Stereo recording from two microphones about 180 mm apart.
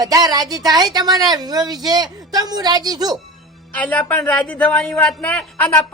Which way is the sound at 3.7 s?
10° left (ahead or behind).